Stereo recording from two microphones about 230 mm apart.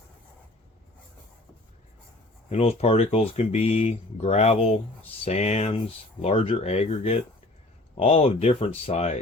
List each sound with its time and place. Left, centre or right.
2.5 s speech: left